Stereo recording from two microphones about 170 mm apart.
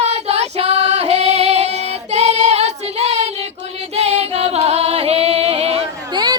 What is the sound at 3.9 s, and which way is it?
Music, 35° right (ahead or behind).